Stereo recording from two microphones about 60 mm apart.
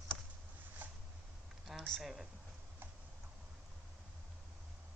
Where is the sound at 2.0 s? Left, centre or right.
Centre.